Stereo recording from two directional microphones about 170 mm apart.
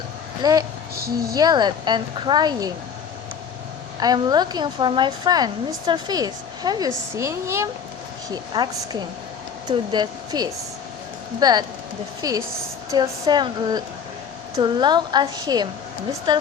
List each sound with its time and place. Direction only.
0.4 s speech: 25° right (ahead or behind)
0.9 s a woman's voice: 65° right (ahead or behind)
1.4 s speech: 25° right (ahead or behind)
4.0 s speech: 25° right (ahead or behind)